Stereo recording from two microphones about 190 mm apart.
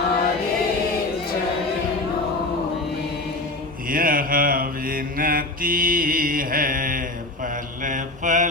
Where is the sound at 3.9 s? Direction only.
50° right (ahead or behind).